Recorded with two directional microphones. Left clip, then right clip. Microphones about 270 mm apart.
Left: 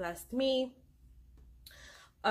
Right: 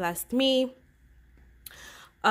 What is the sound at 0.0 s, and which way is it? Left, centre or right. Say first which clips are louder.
Speech: right 7 dB; right.